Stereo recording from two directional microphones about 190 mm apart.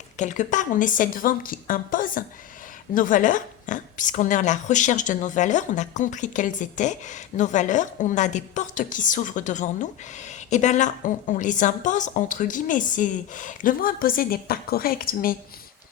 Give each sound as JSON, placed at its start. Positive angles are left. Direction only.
{"t": 0.2, "sound": "a woman's voice", "side_deg": 40}